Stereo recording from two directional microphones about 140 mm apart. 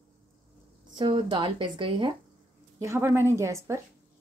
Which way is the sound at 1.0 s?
35° right (ahead or behind).